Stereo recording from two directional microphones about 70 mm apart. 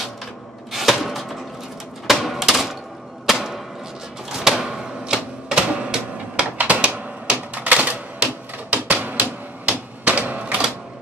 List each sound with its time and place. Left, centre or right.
0.7 s a sound: centre
2.0 s typewriter: centre
3.3 s arrow: centre
4.3 s typewriter: centre